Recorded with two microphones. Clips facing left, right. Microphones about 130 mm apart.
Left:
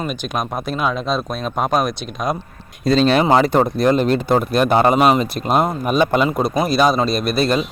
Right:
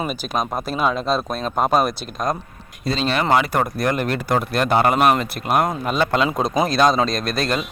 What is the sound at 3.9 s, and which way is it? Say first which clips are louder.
A man's voice: left 6 dB; 20° left (ahead or behind).